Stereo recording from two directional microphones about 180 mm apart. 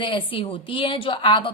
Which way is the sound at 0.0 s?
30° left (ahead or behind).